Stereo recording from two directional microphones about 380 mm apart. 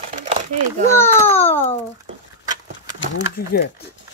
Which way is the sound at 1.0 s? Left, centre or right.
Centre.